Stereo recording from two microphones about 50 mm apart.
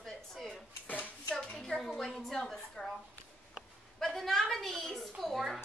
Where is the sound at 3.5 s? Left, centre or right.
Centre.